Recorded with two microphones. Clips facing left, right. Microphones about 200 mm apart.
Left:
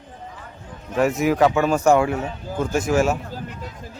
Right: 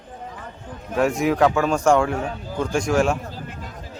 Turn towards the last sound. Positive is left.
turn(degrees=-50)  # may be behind; listen again after turning